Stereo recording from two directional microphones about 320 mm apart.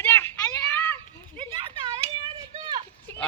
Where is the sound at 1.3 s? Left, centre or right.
Centre.